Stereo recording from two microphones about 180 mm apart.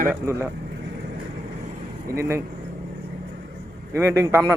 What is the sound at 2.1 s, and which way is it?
Speech, 15° right (ahead or behind).